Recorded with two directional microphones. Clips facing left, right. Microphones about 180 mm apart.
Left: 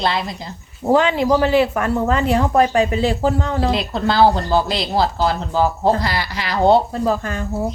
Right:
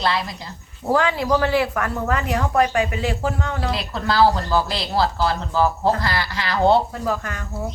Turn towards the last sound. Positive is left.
turn(degrees=30)  # may be behind; listen again after turning